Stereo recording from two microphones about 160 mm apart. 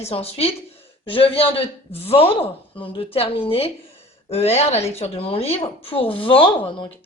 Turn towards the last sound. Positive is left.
turn(degrees=30)  # may be behind; listen again after turning